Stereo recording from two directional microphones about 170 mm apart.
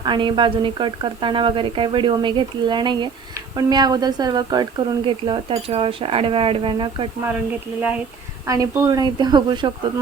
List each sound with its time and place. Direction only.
0.0 s a woman's voice: 30° right (ahead or behind)
7.8 s speech: 5° right (ahead or behind)
8.4 s speech: 20° right (ahead or behind)